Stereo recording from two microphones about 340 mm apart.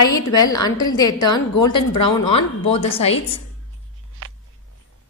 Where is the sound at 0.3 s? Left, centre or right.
Centre.